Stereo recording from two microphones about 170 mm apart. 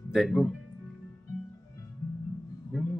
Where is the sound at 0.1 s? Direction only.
Centre (ahead or behind).